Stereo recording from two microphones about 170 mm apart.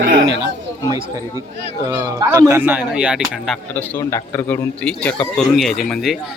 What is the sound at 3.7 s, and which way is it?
A man's voice, 15° left (ahead or behind).